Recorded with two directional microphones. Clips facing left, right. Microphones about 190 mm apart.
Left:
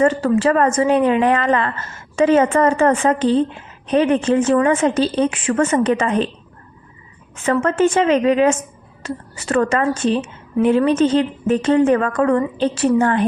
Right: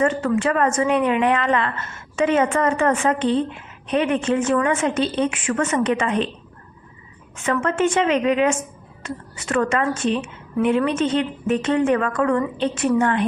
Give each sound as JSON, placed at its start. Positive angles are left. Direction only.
{"t": 0.2, "sound": "a woman's voice", "side_deg": 35}
{"t": 7.4, "sound": "a woman's voice", "side_deg": 35}